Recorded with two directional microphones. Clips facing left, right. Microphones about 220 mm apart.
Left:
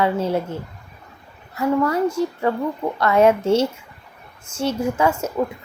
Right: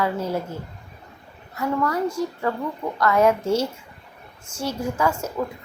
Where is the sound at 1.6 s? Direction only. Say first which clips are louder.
Left 4 dB; 25° left (ahead or behind).